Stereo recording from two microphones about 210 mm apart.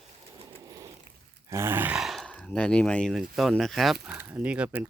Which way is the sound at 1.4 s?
10° right (ahead or behind).